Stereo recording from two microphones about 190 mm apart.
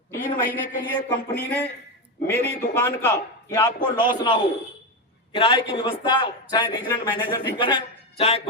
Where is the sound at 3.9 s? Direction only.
25° left (ahead or behind).